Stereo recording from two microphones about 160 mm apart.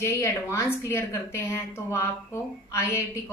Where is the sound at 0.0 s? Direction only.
15° left (ahead or behind).